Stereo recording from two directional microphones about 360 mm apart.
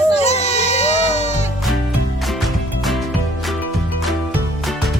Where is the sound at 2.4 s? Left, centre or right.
Centre.